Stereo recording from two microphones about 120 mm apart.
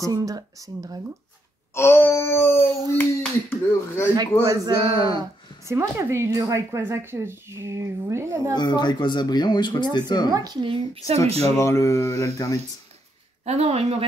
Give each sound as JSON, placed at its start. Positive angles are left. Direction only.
{"t": 0.0, "sound": "speech", "side_deg": -30}
{"t": 1.7, "sound": "speech", "side_deg": 20}
{"t": 4.1, "sound": "speech", "side_deg": -35}
{"t": 5.7, "sound": "speech", "side_deg": -20}
{"t": 8.5, "sound": "speech", "side_deg": 35}
{"t": 10.3, "sound": "speech", "side_deg": -30}
{"t": 10.6, "sound": "speech", "side_deg": -45}
{"t": 11.4, "sound": "speech", "side_deg": 25}
{"t": 13.5, "sound": "speech", "side_deg": -60}